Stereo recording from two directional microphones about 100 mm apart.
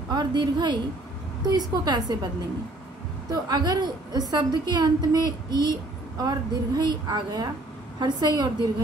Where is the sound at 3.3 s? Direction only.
45° right (ahead or behind).